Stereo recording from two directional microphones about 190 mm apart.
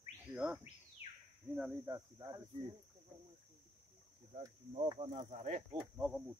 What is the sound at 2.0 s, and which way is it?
Speech, 20° right (ahead or behind).